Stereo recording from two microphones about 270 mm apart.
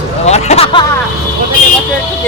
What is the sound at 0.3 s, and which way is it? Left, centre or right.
Speech, left.